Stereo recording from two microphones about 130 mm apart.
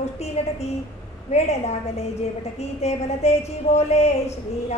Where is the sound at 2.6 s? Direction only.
55° left (ahead or behind).